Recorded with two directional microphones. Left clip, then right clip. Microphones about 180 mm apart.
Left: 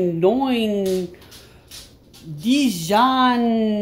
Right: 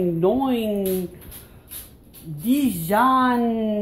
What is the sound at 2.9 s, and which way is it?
Speech, 20° left (ahead or behind).